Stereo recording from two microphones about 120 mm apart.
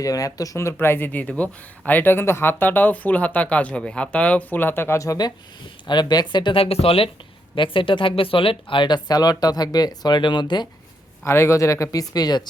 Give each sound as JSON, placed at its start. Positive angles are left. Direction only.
{"t": 0.0, "sound": "speech", "side_deg": 30}
{"t": 11.2, "sound": "speech", "side_deg": 20}